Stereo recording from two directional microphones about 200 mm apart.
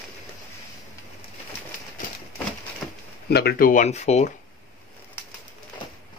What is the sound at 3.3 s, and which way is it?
Speech, 50° left (ahead or behind).